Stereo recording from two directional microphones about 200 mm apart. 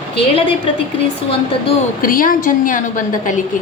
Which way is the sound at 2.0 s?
45° left (ahead or behind).